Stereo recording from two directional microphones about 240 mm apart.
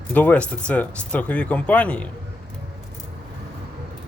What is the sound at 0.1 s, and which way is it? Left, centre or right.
Speech, centre.